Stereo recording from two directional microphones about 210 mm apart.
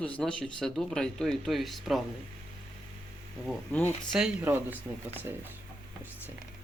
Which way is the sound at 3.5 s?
5° left (ahead or behind).